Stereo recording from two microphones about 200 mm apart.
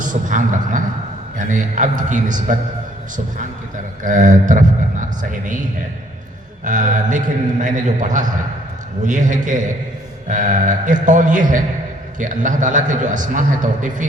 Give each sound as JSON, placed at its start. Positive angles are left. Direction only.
{"t": 0.0, "sound": "a man's voice", "side_deg": -40}
{"t": 4.0, "sound": "a man's voice", "side_deg": -40}
{"t": 6.7, "sound": "a man's voice", "side_deg": -40}